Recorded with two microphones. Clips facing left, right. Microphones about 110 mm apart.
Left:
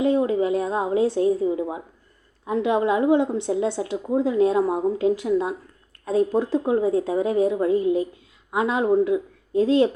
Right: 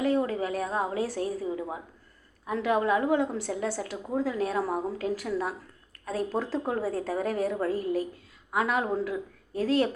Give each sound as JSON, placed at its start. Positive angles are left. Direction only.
{"t": 0.0, "sound": "a woman's voice", "side_deg": 20}